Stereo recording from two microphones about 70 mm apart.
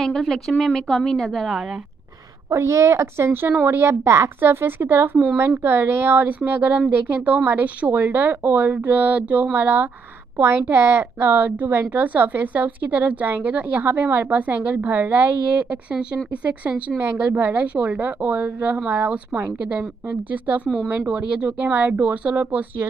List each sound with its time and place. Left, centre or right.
0.0 s a woman's voice: centre
2.5 s a woman's voice: right; by 16.9 s centre
16.9 s a woman's voice: right